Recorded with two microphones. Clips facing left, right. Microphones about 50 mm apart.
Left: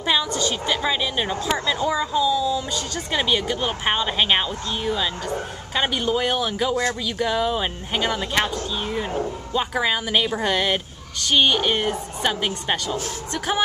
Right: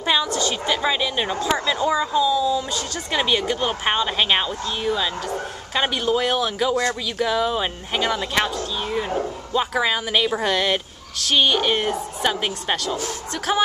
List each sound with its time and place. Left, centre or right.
0.0 s a woman's voice: centre
9.5 s a woman's voice: centre